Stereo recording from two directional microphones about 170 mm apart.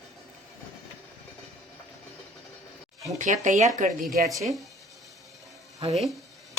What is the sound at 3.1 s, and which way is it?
Speech, 45° right (ahead or behind).